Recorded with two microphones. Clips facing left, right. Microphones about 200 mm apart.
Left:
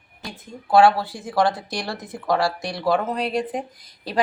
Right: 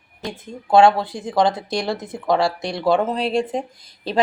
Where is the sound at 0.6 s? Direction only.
25° right (ahead or behind).